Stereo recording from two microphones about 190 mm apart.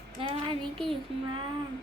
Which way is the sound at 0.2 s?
25° right (ahead or behind).